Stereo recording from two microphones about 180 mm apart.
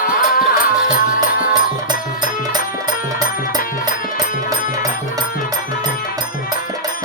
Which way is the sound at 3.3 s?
50° left (ahead or behind).